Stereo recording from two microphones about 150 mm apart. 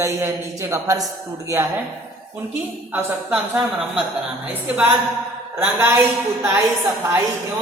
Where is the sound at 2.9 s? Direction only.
10° right (ahead or behind).